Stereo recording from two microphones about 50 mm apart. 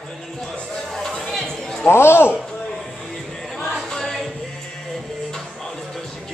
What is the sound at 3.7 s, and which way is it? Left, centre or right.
Choir, centre.